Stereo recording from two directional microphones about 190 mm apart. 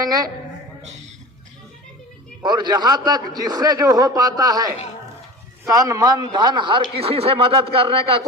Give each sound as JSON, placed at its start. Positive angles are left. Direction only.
{"t": 0.0, "sound": "a man's voice", "side_deg": -20}
{"t": 0.8, "sound": "a sound", "side_deg": -35}
{"t": 2.4, "sound": "a man's voice", "side_deg": -20}